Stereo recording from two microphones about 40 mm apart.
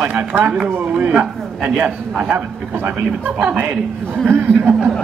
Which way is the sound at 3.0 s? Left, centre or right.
Right.